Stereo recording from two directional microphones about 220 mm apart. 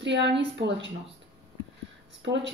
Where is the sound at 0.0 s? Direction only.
55° right (ahead or behind).